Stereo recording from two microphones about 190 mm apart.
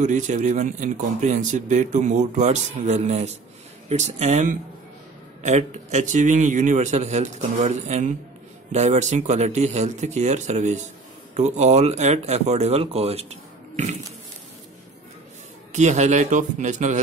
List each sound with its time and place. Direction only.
0.0 s speech: 40° right (ahead or behind)
15.7 s speech: 40° right (ahead or behind)